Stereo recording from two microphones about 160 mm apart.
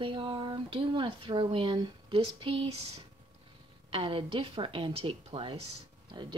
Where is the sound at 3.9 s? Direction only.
35° right (ahead or behind).